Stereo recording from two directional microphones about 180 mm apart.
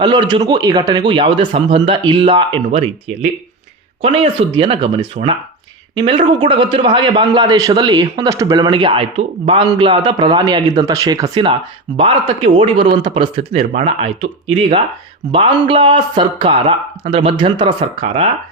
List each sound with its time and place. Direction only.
0.0 s a man's voice: 25° right (ahead or behind)
4.0 s a man's voice: 35° right (ahead or behind)